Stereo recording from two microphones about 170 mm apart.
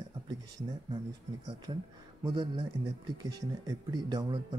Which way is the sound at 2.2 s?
30° right (ahead or behind).